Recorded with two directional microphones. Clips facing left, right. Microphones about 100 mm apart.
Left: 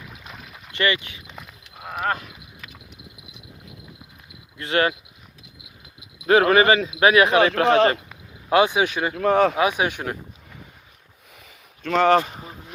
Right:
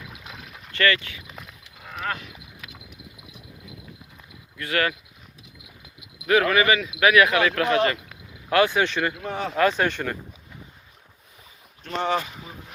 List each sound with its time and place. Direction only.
0.1 s a sound: centre (ahead or behind)
0.7 s speech: 20° left (ahead or behind)
1.3 s a sound: centre (ahead or behind)
1.6 s a sound: 55° left (ahead or behind)
4.5 s speech: 25° left (ahead or behind)
6.2 s speech: 30° left (ahead or behind); by 9.1 s 10° left (ahead or behind)
9.2 s speech: 70° left (ahead or behind)
9.6 s speech: 15° left (ahead or behind)
11.8 s speech: 75° left (ahead or behind)